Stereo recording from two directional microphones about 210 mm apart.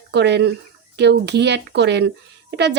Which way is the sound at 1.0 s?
55° right (ahead or behind).